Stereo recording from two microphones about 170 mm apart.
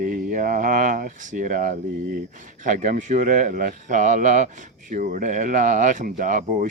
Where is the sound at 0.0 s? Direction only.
50° right (ahead or behind).